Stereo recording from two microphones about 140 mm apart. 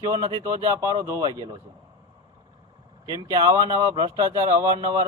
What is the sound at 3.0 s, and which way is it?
Speech, 25° right (ahead or behind).